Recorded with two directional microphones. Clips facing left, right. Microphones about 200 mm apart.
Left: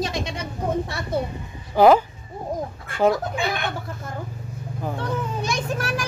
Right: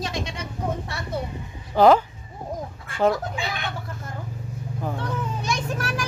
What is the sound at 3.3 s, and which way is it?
Speech, 55° left (ahead or behind).